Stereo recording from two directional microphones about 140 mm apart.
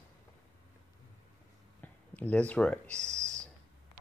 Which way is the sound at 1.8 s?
10° left (ahead or behind).